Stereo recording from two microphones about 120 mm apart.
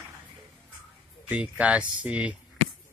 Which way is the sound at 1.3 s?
10° right (ahead or behind).